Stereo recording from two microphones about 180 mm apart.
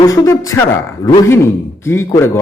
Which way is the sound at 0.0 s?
15° left (ahead or behind).